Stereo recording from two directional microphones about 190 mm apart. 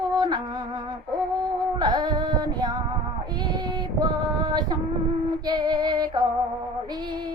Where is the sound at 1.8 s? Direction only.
20° right (ahead or behind).